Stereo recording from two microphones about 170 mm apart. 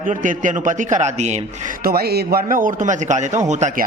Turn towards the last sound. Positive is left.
turn(degrees=-45)  # may be behind; listen again after turning